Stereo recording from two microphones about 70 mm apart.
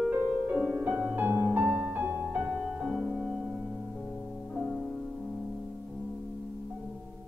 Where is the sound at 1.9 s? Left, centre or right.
Right.